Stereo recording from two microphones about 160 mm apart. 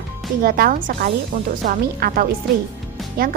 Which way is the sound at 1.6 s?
65° right (ahead or behind).